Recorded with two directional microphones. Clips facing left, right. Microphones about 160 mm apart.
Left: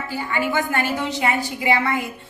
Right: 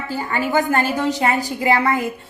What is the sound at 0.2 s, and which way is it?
A woman's voice, 40° right (ahead or behind).